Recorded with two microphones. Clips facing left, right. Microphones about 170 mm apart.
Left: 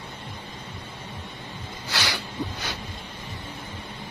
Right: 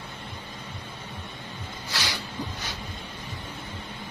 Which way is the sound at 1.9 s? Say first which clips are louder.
Left 3 dB; 75° left (ahead or behind).